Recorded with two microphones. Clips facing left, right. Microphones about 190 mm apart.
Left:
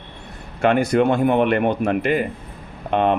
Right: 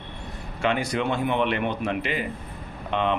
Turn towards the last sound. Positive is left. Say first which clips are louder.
# left 6 dB
turn(degrees=50)  # may be behind; listen again after turning